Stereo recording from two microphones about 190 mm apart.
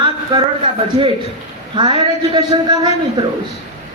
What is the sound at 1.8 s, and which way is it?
Speech, 25° right (ahead or behind).